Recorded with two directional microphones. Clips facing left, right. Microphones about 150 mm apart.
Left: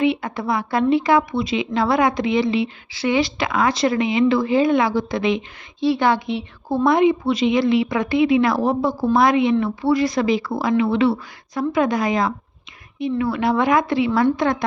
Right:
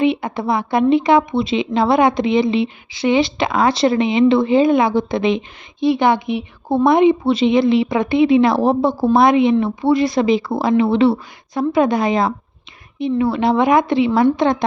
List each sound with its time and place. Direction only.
0.0 s a woman's voice: 20° right (ahead or behind)